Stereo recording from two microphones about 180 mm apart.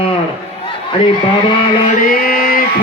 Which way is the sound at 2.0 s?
50° left (ahead or behind).